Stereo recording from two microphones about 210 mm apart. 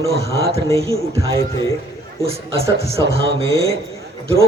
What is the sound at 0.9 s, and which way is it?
Speech, 15° right (ahead or behind).